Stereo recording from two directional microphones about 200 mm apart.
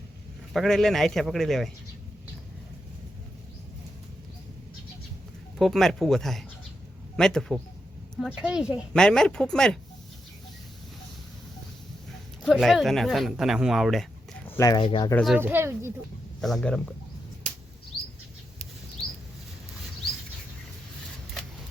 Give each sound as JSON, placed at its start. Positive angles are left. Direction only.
{"t": 0.5, "sound": "a woman's voice", "side_deg": 0}
{"t": 5.5, "sound": "a woman's voice", "side_deg": 0}
{"t": 12.4, "sound": "speech", "side_deg": 0}
{"t": 15.1, "sound": "a woman's voice", "side_deg": 0}
{"t": 15.4, "sound": "speech", "side_deg": -10}
{"t": 16.4, "sound": "a woman's voice", "side_deg": 0}